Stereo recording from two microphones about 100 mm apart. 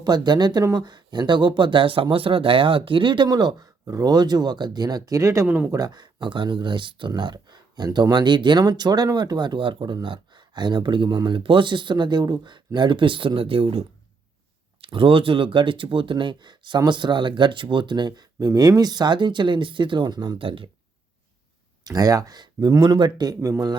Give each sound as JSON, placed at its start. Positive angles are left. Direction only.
{"t": 0.0, "sound": "speech", "side_deg": -45}
{"t": 3.2, "sound": "speech", "side_deg": -45}
{"t": 5.5, "sound": "speech", "side_deg": -20}
{"t": 5.7, "sound": "speech", "side_deg": -45}
{"t": 8.1, "sound": "speech", "side_deg": -50}
{"t": 21.8, "sound": "speech", "side_deg": -35}